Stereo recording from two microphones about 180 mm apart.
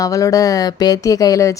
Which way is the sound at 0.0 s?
20° left (ahead or behind).